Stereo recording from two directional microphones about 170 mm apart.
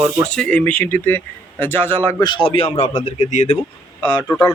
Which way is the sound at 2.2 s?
30° left (ahead or behind).